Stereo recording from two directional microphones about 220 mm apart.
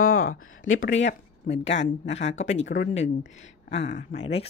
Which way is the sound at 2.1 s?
30° left (ahead or behind).